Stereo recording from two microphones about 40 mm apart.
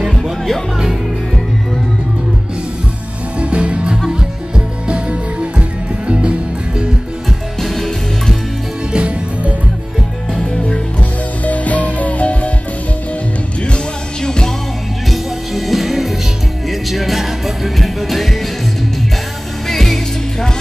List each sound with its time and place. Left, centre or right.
0.1 s music: centre
3.3 s music: right
7.6 s music: centre
8.9 s music: right
10.5 s music: left
11.0 s music: left
14.2 s music: centre
15.0 s music: centre
19.7 s music: centre